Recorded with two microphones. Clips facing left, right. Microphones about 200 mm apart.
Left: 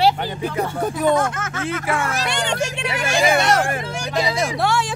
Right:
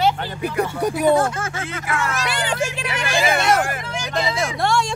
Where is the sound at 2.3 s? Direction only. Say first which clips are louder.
Even; 5° right (ahead or behind).